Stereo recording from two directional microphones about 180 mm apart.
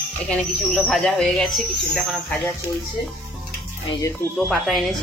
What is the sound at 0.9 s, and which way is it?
A woman's voice, 5° left (ahead or behind).